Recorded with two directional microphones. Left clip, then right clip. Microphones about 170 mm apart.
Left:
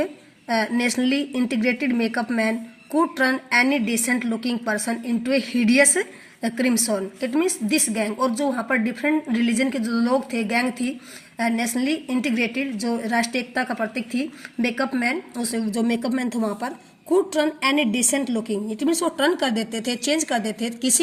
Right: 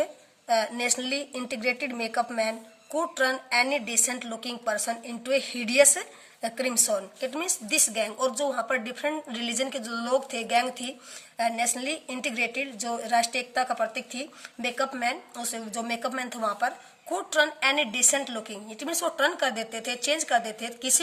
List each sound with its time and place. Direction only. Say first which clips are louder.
0.0 s a woman's voice: left 3 dB; 15° left (ahead or behind)